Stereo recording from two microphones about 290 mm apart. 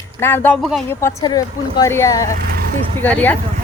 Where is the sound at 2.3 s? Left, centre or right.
Right.